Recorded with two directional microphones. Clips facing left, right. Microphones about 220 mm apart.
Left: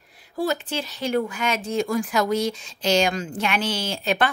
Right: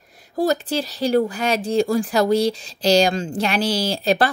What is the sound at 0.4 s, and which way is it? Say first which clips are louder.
Speech: right 5 dB; 40° right (ahead or behind).